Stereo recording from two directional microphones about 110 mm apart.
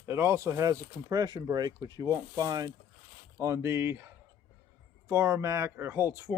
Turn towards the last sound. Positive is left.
turn(degrees=-20)  # may be behind; listen again after turning